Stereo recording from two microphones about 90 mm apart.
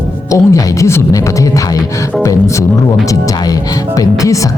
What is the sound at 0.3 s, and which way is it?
Speech, 35° left (ahead or behind).